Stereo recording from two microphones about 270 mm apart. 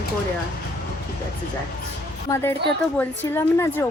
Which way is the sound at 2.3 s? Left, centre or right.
Centre.